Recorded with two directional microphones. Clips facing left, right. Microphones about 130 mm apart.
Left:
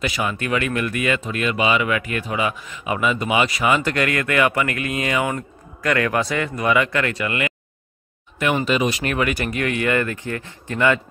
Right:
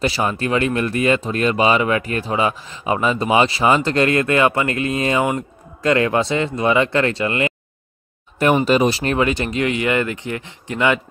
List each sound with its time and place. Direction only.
0.0 s speech: 35° right (ahead or behind)
8.6 s speech: 35° right (ahead or behind); by 11.0 s 20° right (ahead or behind)